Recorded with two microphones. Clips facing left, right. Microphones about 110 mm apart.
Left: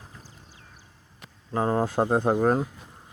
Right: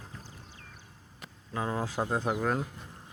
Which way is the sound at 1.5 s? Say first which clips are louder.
Left 8 dB; 45° left (ahead or behind).